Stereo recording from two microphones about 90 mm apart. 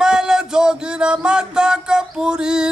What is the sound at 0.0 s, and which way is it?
Music, 5° right (ahead or behind).